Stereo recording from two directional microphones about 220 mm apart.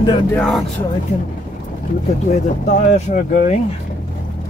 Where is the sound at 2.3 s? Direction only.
30° left (ahead or behind).